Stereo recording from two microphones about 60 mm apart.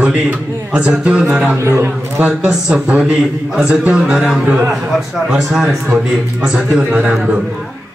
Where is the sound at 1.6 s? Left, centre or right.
Right.